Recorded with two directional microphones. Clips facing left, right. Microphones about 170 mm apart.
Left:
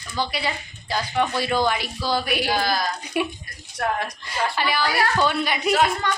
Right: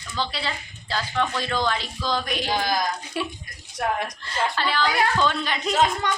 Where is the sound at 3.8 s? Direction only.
15° right (ahead or behind).